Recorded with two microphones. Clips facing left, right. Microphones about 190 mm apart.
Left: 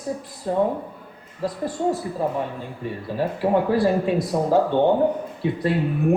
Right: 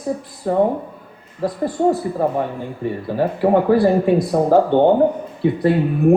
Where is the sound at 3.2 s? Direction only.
55° right (ahead or behind).